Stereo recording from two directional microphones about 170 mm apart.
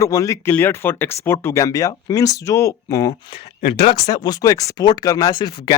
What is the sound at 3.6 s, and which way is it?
Speech, 65° left (ahead or behind).